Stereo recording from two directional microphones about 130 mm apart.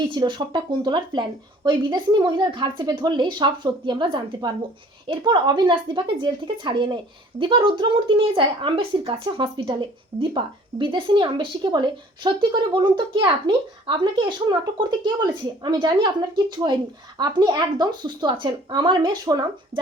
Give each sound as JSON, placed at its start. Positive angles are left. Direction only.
{"t": 0.1, "sound": "speech", "side_deg": -35}